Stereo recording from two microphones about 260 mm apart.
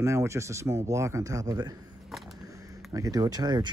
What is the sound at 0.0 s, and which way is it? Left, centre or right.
Speech, centre.